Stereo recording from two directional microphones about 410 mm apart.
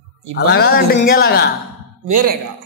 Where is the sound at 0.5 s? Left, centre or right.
Left.